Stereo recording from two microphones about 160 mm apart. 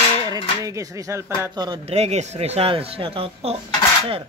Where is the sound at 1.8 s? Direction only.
40° right (ahead or behind).